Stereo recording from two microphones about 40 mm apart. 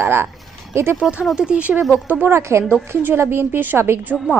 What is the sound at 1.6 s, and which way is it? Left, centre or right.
Speech, right.